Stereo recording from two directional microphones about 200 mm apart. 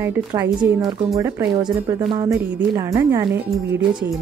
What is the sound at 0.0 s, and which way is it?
Music, 20° right (ahead or behind).